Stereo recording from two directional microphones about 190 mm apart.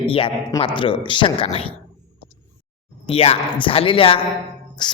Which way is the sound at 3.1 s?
30° left (ahead or behind).